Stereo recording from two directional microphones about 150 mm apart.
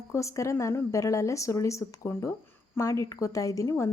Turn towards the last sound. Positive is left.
turn(degrees=20)  # may be behind; listen again after turning